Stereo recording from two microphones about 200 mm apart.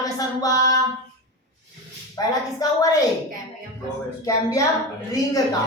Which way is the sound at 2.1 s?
20° left (ahead or behind).